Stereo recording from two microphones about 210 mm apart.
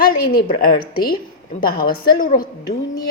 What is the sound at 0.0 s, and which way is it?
Speech, 40° left (ahead or behind).